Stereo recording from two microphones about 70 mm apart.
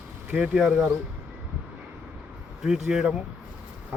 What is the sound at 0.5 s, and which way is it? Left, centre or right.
Speech, centre.